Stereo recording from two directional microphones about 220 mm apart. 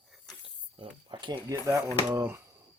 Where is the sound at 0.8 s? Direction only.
20° right (ahead or behind).